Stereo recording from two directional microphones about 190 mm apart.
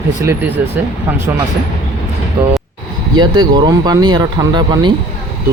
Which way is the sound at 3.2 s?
20° right (ahead or behind).